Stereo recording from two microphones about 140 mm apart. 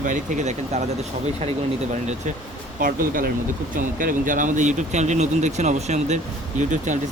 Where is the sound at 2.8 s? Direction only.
80° right.